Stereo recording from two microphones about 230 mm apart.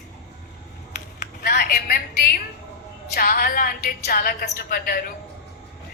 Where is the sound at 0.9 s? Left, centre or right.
Left.